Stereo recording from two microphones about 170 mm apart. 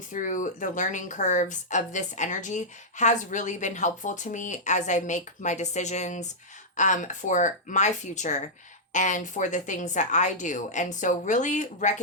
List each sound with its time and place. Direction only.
0.1 s speech: 50° left (ahead or behind)